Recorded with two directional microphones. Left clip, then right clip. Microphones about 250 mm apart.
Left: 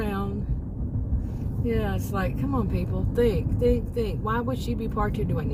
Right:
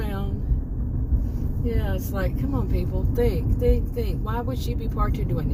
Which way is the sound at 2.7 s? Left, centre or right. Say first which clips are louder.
Even; left.